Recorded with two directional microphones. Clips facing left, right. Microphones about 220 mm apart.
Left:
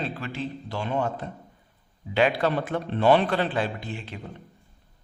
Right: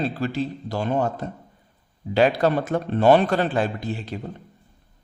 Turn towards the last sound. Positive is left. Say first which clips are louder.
# right 6 dB
turn(degrees=-40)  # may be behind; listen again after turning